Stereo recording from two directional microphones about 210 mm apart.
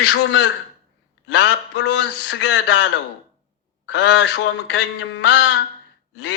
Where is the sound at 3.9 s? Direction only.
55° left (ahead or behind).